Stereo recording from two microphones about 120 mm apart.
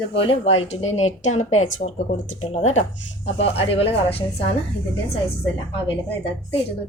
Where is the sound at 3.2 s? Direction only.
55° left (ahead or behind).